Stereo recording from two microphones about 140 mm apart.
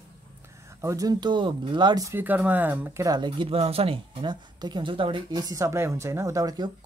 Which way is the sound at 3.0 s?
30° right (ahead or behind).